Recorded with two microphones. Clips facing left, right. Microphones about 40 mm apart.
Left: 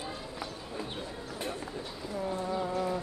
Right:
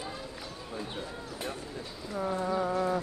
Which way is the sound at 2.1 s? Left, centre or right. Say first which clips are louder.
Right 3 dB; right.